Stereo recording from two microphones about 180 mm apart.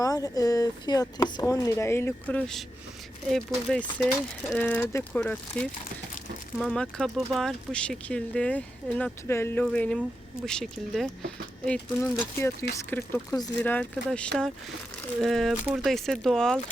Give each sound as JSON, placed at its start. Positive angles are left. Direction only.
{"t": 0.0, "sound": "speech", "side_deg": 20}